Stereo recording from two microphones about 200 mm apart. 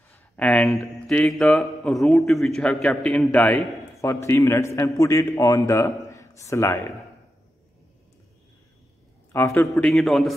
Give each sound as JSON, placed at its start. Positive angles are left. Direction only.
{"t": 0.1, "sound": "a man's voice", "side_deg": 5}
{"t": 9.3, "sound": "a man's voice", "side_deg": 15}